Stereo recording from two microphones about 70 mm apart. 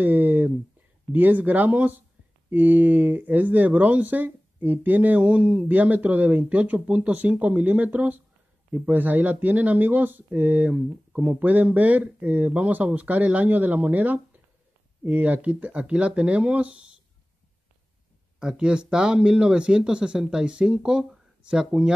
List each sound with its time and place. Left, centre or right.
0.0 s a sound: right
1.1 s speech: right
18.4 s speech: centre